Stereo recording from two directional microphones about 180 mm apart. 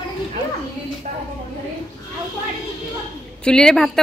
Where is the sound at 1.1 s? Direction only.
40° right (ahead or behind).